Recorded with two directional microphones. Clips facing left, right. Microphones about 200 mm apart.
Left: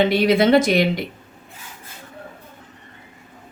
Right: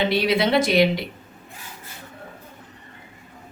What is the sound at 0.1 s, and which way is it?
Speech, 45° left (ahead or behind).